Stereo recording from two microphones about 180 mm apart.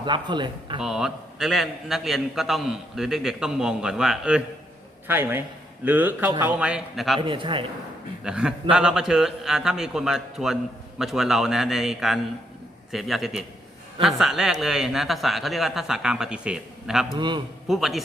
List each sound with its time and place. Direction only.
0.0 s speech: 25° right (ahead or behind)
0.8 s a man's voice: 5° right (ahead or behind)
7.2 s a man's voice: 25° right (ahead or behind)
8.2 s a man's voice: 5° right (ahead or behind)
17.2 s a man's voice: 25° right (ahead or behind)
17.7 s a man's voice: centre (ahead or behind)